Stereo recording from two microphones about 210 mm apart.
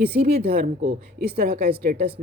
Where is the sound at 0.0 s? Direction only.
50° right (ahead or behind).